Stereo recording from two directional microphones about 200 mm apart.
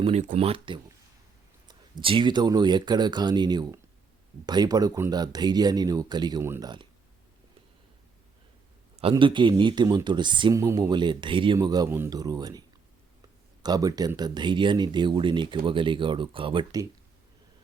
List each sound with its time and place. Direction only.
0.0 s speech: 35° right (ahead or behind)
9.0 s speech: 25° right (ahead or behind)